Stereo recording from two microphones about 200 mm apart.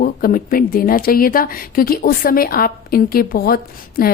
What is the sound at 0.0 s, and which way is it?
Speech, 45° left (ahead or behind).